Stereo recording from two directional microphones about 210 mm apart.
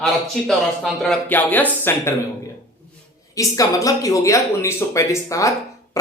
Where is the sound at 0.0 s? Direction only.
Centre (ahead or behind).